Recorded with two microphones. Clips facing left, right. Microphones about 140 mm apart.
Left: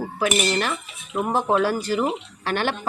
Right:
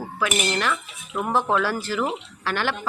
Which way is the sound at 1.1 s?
15° left (ahead or behind).